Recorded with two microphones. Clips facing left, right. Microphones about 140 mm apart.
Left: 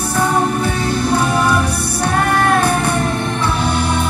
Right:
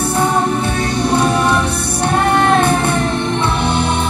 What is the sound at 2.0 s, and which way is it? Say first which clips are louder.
Music: right 2 dB; 20° right (ahead or behind).